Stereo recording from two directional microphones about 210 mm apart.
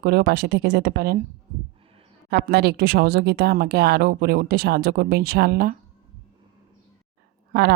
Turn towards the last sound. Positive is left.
turn(degrees=-50)  # may be behind; listen again after turning